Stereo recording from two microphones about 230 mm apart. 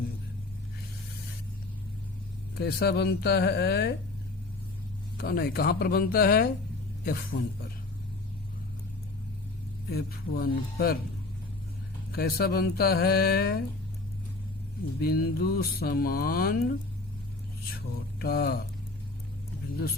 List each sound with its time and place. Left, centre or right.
2.6 s speech: left
5.1 s speech: left
9.9 s speech: left
12.1 s speech: left
15.0 s speech: left
18.2 s speech: left